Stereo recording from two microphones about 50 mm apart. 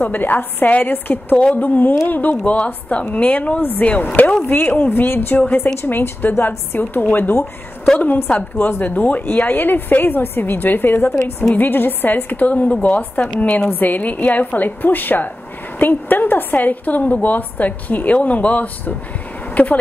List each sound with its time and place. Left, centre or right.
0.0 s a woman's voice: left
0.7 s a woman's voice: left
0.9 s a woman's voice: left
2.4 s a woman's voice: left
4.5 s speech: left
6.8 s a woman's voice: left
8.5 s a woman's voice: left
13.6 s a woman's voice: left